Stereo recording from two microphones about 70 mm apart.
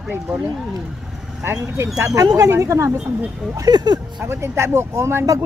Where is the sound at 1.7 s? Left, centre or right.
Right.